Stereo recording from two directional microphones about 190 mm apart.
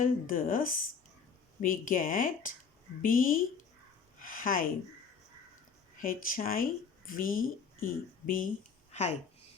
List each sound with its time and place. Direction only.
0.0 s speech: 45° left (ahead or behind)
6.0 s speech: 45° left (ahead or behind)
8.9 s a sound: 35° left (ahead or behind)